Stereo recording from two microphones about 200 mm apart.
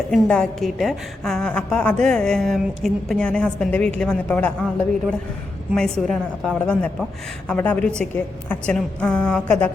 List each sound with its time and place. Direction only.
0.1 s a woman's voice: centre (ahead or behind)
5.7 s a woman's voice: centre (ahead or behind)